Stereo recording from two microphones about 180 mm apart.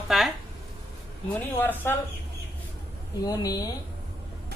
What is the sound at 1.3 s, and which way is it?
Speech, 10° left (ahead or behind).